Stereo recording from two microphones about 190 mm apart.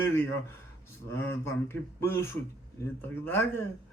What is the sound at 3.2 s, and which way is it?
Speech, 10° left (ahead or behind).